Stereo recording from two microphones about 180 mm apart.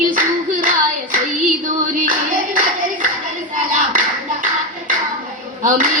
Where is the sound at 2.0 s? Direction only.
45° right (ahead or behind).